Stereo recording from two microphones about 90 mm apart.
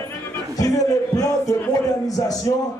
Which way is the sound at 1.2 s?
40° left (ahead or behind).